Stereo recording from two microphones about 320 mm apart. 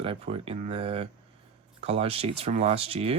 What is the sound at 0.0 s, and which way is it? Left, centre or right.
Speech, centre.